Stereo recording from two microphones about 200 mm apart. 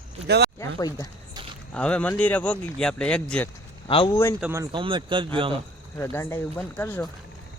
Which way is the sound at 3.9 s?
25° left (ahead or behind).